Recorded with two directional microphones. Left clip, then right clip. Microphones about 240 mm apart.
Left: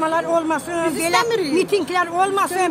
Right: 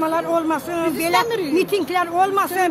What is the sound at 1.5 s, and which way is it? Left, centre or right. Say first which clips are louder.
Speech: right 1 dB; centre.